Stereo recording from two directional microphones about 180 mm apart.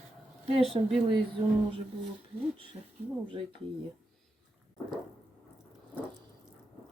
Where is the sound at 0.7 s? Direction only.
30° right (ahead or behind).